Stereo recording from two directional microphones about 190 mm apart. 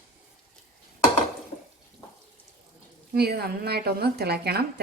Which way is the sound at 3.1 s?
55° right (ahead or behind).